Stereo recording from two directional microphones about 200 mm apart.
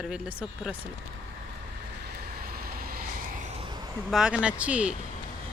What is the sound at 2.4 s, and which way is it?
Vehicle, 50° right (ahead or behind).